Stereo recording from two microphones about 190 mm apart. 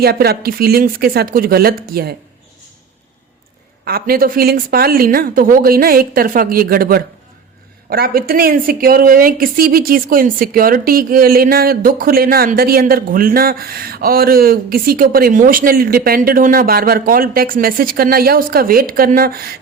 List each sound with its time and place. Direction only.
0.0 s speech: 55° right (ahead or behind)
3.8 s speech: 50° right (ahead or behind)